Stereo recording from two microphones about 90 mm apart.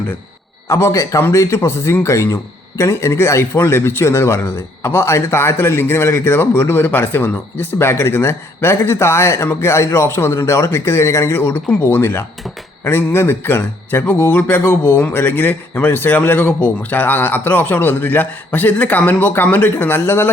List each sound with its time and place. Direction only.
0.7 s a man's voice: 35° left (ahead or behind)